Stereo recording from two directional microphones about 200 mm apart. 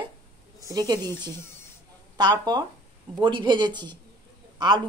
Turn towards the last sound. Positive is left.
turn(degrees=-20)  # may be behind; listen again after turning